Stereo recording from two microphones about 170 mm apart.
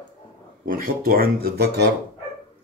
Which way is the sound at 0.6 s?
55° right (ahead or behind).